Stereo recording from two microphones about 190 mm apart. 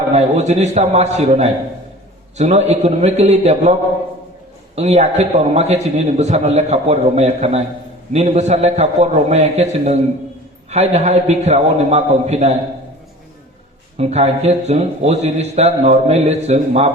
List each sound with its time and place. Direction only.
0.1 s a man's voice: 35° right (ahead or behind)
13.9 s a man's voice: 35° right (ahead or behind)